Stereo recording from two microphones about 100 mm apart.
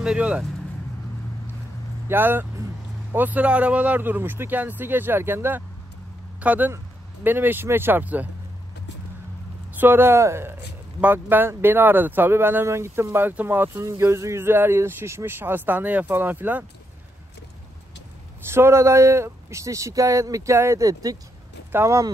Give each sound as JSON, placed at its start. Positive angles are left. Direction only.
{"t": 0.0, "sound": "speech", "side_deg": -10}
{"t": 2.0, "sound": "speech", "side_deg": -20}
{"t": 9.8, "sound": "speech", "side_deg": -20}
{"t": 13.7, "sound": "speech", "side_deg": -25}
{"t": 18.4, "sound": "speech", "side_deg": -25}